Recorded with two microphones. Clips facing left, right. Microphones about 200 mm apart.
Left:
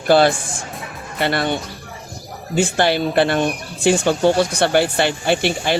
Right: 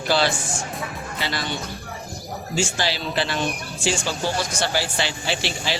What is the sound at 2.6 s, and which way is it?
Speech, 60° left (ahead or behind).